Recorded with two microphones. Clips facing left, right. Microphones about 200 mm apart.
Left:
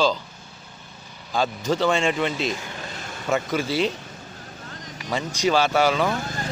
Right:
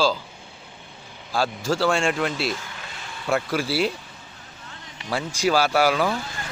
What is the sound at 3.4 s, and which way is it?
Speech, 5° right (ahead or behind).